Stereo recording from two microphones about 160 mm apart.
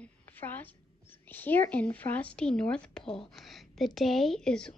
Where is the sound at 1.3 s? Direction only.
10° left (ahead or behind).